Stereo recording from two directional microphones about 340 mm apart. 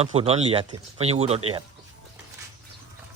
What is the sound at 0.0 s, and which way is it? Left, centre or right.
Speech, centre.